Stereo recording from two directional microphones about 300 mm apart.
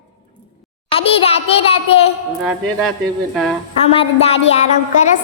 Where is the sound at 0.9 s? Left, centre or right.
Centre.